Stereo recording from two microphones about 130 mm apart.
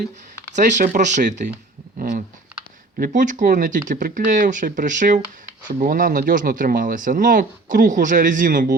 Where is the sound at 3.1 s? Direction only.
75° right (ahead or behind).